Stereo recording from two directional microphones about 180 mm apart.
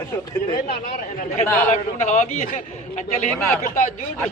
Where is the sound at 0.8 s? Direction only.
50° left (ahead or behind).